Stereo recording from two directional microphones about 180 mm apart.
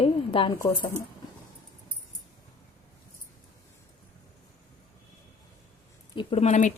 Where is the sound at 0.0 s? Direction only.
30° left (ahead or behind).